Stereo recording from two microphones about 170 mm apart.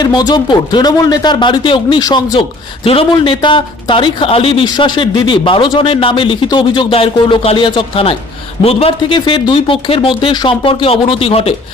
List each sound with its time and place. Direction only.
0.0 s a man's voice: 25° left (ahead or behind)